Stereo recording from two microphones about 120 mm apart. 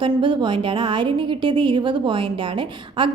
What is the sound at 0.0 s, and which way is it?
A woman's voice, 40° right (ahead or behind).